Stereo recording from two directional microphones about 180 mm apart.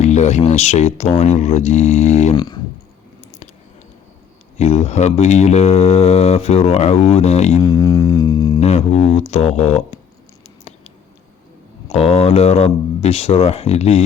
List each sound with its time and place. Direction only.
0.0 s speech: 35° left (ahead or behind)
2.3 s a sound: 25° left (ahead or behind)
4.5 s speech: 35° left (ahead or behind)
7.6 s a sound: 20° left (ahead or behind)
8.6 s speech: 35° left (ahead or behind)
11.9 s speech: 35° left (ahead or behind)